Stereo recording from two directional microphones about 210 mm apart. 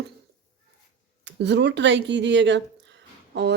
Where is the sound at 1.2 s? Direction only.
55° right (ahead or behind).